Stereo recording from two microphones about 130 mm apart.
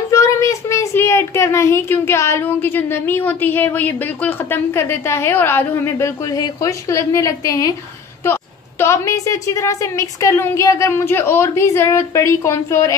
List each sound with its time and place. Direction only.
0.1 s a child's voice: 25° left (ahead or behind)